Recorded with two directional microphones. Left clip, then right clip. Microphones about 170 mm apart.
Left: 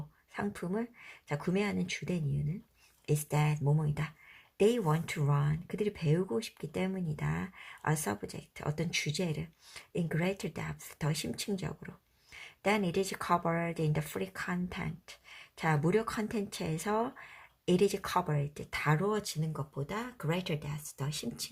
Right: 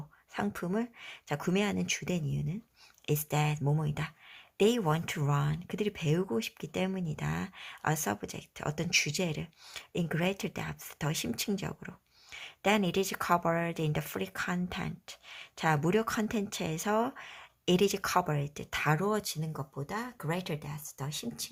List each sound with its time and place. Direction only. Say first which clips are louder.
0.3 s speech: right 3 dB; 35° right (ahead or behind); by 21.5 s 20° right (ahead or behind)